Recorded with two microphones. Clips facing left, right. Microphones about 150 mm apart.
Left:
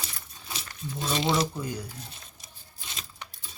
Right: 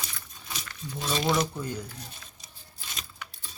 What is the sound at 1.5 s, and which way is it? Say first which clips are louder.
Speech: even; 10° left (ahead or behind).